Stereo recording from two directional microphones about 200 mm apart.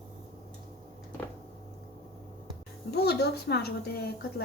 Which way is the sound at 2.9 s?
55° left (ahead or behind).